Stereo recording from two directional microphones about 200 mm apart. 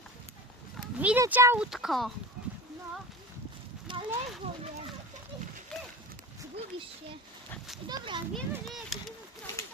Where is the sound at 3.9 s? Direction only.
25° right (ahead or behind).